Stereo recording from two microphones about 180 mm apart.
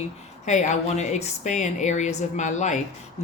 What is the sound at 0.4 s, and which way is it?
Speech, 40° left (ahead or behind).